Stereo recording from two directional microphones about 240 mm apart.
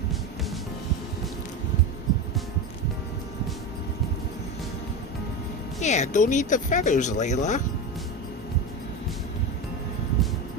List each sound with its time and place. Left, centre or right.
5.8 s speech: left